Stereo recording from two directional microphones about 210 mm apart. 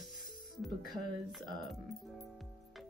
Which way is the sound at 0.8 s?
40° left (ahead or behind).